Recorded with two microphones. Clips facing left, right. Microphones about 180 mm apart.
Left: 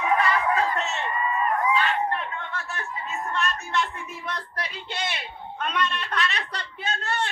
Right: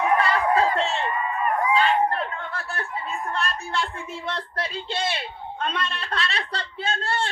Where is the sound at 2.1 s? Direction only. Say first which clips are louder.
Right 2 dB; 35° right (ahead or behind).